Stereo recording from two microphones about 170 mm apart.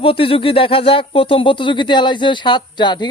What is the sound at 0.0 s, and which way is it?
Speech, 30° left (ahead or behind).